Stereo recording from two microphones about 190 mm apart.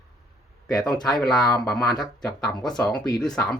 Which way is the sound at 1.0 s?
Centre (ahead or behind).